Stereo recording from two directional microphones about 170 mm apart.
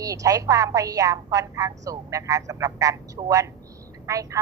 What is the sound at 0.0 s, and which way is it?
A woman's voice, 20° right (ahead or behind).